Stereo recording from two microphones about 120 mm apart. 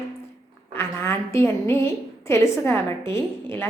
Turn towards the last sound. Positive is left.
turn(degrees=20)  # may be behind; listen again after turning